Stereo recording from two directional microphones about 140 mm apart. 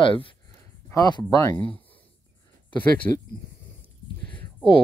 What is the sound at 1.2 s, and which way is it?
Speech, 20° left (ahead or behind).